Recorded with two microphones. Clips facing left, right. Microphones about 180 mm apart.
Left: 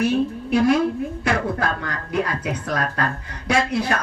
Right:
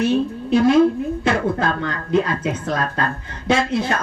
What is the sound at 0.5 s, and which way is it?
Speech, 25° right (ahead or behind).